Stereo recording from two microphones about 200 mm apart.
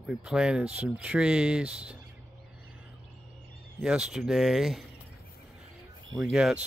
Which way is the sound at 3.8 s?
5° right (ahead or behind).